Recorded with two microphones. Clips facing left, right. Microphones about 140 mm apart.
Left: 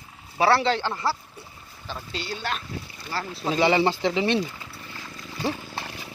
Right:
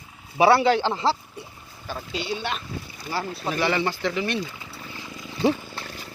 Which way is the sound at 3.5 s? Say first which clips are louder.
Left 4 dB; 20° left (ahead or behind).